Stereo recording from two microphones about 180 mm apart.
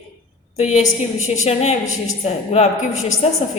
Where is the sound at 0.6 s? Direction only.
40° left (ahead or behind).